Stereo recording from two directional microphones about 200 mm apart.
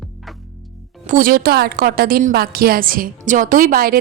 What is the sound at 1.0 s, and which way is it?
A woman's voice, 45° right (ahead or behind).